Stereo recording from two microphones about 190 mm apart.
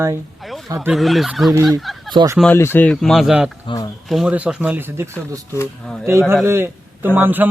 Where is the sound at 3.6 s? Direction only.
20° left (ahead or behind).